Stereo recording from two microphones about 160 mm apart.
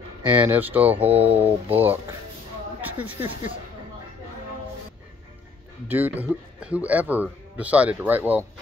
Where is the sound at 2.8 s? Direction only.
10° right (ahead or behind).